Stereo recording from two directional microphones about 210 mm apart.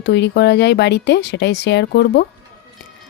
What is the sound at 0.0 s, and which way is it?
Speech, 55° left (ahead or behind).